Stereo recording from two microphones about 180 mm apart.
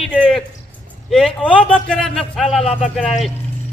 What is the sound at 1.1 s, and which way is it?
A man's voice, 5° left (ahead or behind).